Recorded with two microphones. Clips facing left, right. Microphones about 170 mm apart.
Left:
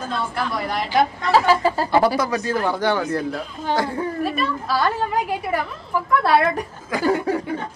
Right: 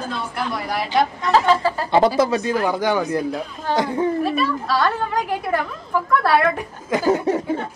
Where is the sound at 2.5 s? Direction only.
10° right (ahead or behind).